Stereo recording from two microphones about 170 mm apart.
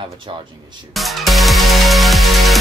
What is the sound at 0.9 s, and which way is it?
Music, centre (ahead or behind).